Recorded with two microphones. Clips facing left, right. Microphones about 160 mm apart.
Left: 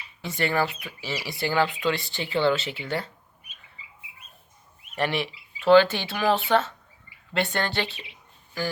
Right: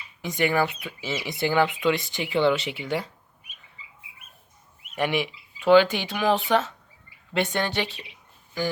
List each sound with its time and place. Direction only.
0.2 s speech: 15° right (ahead or behind)
4.9 s speech: 10° right (ahead or behind)